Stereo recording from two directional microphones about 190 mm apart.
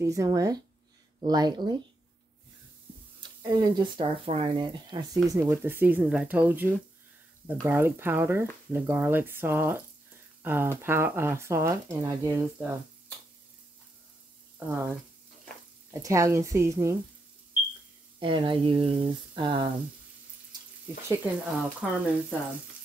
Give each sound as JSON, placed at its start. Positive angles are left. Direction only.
{"t": 0.0, "sound": "speech", "side_deg": -15}
{"t": 3.2, "sound": "speech", "side_deg": -20}
{"t": 14.6, "sound": "speech", "side_deg": -10}
{"t": 15.9, "sound": "speech", "side_deg": -15}
{"t": 18.2, "sound": "speech", "side_deg": -25}
{"t": 21.1, "sound": "speech", "side_deg": -10}